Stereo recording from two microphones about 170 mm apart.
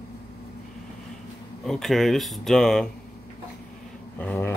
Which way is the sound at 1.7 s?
Centre (ahead or behind).